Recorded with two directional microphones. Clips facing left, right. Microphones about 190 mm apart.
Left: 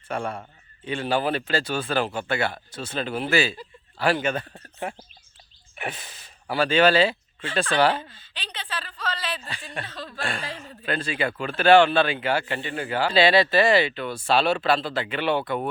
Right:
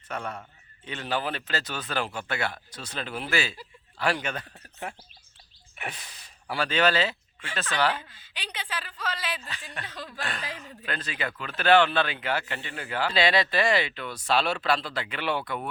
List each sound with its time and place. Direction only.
0.1 s speech: 30° left (ahead or behind)
6.6 s speech: 30° left (ahead or behind)
8.1 s speech: 10° right (ahead or behind)
10.2 s speech: 30° left (ahead or behind)